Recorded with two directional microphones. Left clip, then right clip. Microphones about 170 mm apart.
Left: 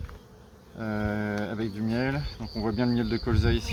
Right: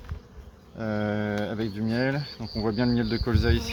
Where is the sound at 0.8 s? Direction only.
20° right (ahead or behind).